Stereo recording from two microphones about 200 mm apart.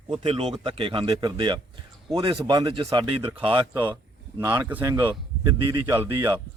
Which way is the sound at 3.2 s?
10° right (ahead or behind).